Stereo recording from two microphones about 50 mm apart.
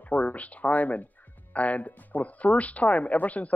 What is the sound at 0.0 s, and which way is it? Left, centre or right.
Speech, left.